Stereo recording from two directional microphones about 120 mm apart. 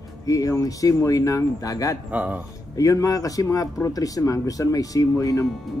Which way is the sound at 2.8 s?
30° left (ahead or behind).